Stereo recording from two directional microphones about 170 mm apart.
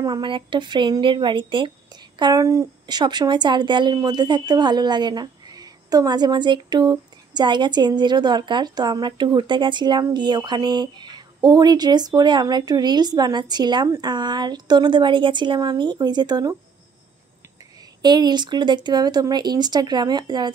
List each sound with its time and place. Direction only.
0.0 s speech: 25° right (ahead or behind)
18.0 s speech: 25° right (ahead or behind)